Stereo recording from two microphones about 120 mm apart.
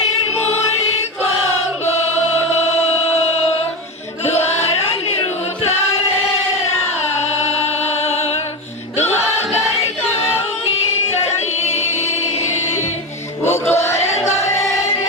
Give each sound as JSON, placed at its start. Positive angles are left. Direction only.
{"t": 1.2, "sound": "choir", "side_deg": 55}
{"t": 4.3, "sound": "choir", "side_deg": 60}
{"t": 7.9, "sound": "music", "side_deg": 60}
{"t": 10.8, "sound": "music", "side_deg": 60}
{"t": 12.5, "sound": "music", "side_deg": 20}
{"t": 13.4, "sound": "chant", "side_deg": 20}